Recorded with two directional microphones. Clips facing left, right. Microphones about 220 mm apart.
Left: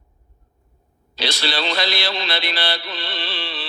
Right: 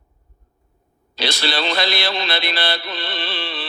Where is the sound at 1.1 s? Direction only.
55° right (ahead or behind).